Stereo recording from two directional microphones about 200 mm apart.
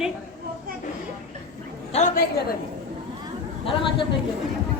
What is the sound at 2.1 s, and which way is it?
Speech, 50° left (ahead or behind).